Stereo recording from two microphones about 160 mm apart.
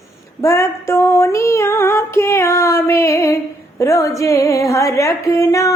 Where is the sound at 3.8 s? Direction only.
20° left (ahead or behind).